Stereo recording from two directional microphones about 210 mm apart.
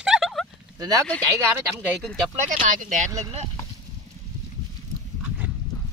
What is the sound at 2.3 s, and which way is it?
Speech, 40° right (ahead or behind).